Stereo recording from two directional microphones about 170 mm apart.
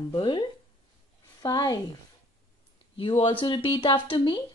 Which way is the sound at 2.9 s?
30° left (ahead or behind).